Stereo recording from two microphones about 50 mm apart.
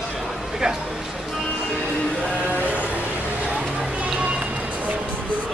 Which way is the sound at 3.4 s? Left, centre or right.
Centre.